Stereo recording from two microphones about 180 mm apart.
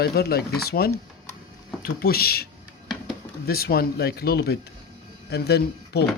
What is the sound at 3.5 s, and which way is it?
Speech, 60° left (ahead or behind).